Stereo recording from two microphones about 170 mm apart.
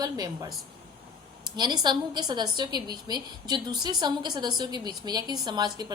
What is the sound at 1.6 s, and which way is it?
A woman's voice, 25° right (ahead or behind).